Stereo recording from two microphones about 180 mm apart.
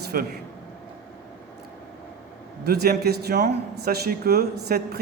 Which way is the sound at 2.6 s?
60° right (ahead or behind).